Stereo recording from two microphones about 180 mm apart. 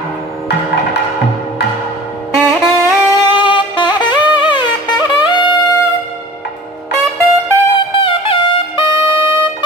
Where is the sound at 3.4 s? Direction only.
25° left (ahead or behind).